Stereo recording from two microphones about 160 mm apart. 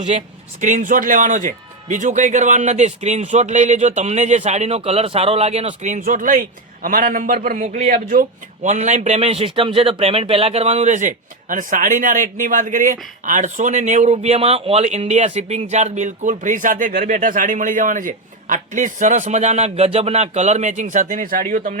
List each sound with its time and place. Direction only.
0.6 s a man's voice: 55° right (ahead or behind)